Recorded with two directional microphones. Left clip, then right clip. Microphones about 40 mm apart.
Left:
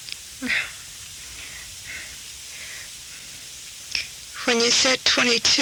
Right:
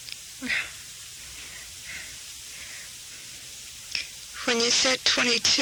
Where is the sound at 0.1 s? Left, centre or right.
Centre.